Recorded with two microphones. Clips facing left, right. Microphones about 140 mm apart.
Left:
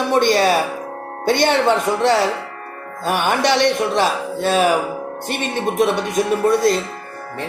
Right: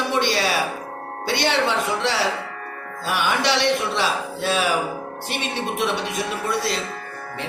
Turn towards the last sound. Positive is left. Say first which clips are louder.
# left 9 dB
turn(degrees=50)  # may be behind; listen again after turning